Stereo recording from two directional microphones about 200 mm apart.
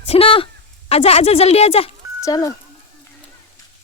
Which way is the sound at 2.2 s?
15° left (ahead or behind).